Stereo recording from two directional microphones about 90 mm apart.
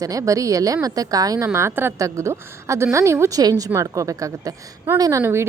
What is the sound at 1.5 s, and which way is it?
A woman's voice, 25° right (ahead or behind).